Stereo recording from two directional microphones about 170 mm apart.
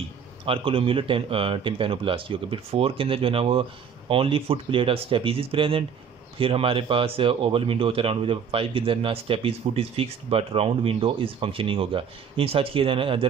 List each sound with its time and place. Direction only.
0.5 s speech: 30° right (ahead or behind)